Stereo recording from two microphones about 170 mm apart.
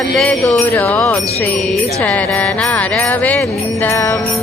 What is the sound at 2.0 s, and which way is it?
Music, 5° left (ahead or behind).